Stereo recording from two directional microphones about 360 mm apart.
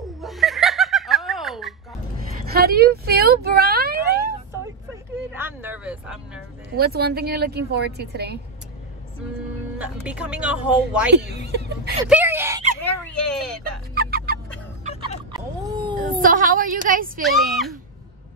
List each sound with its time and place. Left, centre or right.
0.0 s snicker: centre
2.5 s a sound: right
5.3 s music: centre
6.8 s a woman's voice: right
9.8 s speech: centre
11.1 s speech: right
12.1 s speech: centre
13.0 s a sound: centre
13.9 s turkey: right
14.9 s fowl: centre
16.0 s a woman's voice: right
17.2 s speech: centre